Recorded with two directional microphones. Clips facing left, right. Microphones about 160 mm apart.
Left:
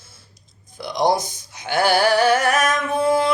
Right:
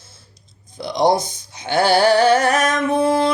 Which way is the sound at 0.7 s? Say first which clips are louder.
Right 3 dB; 20° right (ahead or behind).